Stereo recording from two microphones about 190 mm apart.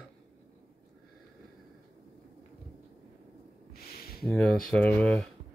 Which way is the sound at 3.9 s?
55° left (ahead or behind).